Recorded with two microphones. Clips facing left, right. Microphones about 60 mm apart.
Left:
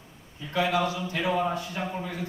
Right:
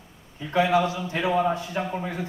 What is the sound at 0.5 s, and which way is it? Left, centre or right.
A man's voice, right.